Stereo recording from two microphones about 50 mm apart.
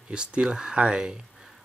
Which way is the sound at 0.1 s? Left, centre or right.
Centre.